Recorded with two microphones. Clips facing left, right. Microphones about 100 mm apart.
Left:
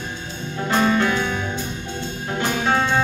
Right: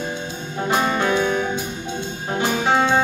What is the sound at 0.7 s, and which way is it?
Music, 20° right (ahead or behind).